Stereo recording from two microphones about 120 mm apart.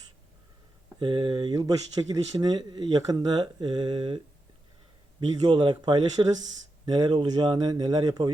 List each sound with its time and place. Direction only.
0.9 s speech: 40° right (ahead or behind)
5.3 s speech: 40° right (ahead or behind)